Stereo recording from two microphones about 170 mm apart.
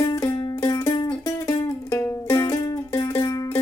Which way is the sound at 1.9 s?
15° left (ahead or behind).